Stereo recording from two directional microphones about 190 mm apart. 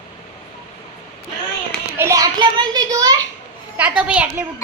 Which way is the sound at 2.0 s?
15° right (ahead or behind).